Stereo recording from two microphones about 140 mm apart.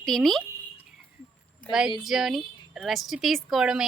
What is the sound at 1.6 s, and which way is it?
Speech, 10° left (ahead or behind).